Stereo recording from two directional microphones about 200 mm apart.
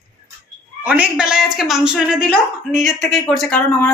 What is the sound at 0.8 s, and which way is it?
Speech, 5° right (ahead or behind).